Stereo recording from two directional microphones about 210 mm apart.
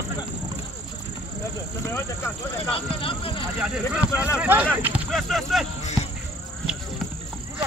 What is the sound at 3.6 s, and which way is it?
Speech, 5° right (ahead or behind).